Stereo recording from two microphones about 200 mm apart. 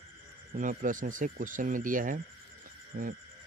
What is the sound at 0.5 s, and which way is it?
Speech, 40° right (ahead or behind).